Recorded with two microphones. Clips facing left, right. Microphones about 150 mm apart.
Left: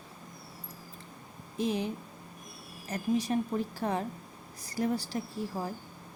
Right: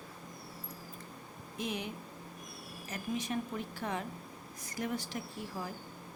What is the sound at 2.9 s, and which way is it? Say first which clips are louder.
A woman's voice: left 7 dB; 35° left (ahead or behind).